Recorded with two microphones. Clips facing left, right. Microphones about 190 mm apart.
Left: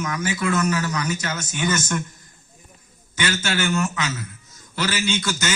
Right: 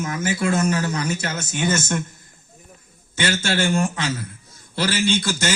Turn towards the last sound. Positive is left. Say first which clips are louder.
# right 3 dB
turn(degrees=-30)  # may be behind; listen again after turning